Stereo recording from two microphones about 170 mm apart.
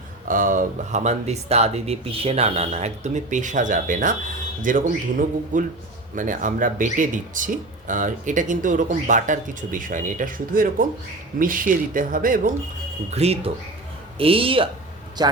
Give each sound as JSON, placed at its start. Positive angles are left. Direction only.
{"t": 0.3, "sound": "speech", "side_deg": -55}
{"t": 13.1, "sound": "a man's voice", "side_deg": -35}